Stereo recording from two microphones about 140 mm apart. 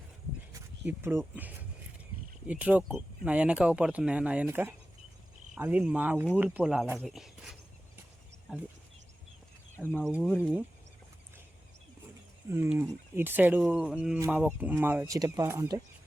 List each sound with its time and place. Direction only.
0.5 s speech: 15° right (ahead or behind)
10.1 s speech: 10° right (ahead or behind)
12.5 s speech: 15° right (ahead or behind)